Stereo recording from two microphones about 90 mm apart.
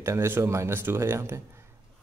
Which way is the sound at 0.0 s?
30° right (ahead or behind).